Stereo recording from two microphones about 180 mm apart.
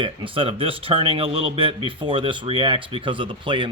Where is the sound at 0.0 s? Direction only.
30° right (ahead or behind).